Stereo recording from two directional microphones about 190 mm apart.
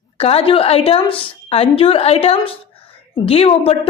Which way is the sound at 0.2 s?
30° left (ahead or behind).